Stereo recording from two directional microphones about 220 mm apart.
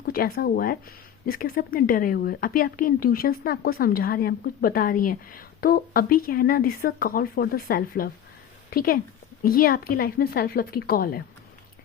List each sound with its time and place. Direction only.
0.0 s a woman's voice: 40° left (ahead or behind)